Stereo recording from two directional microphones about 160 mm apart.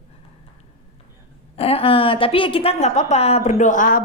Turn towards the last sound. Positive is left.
turn(degrees=55)  # may be behind; listen again after turning